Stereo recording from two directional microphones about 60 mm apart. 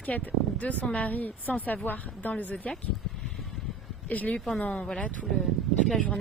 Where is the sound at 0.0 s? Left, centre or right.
Left.